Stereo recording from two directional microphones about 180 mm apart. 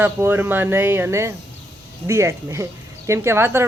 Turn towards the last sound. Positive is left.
turn(degrees=-15)  # may be behind; listen again after turning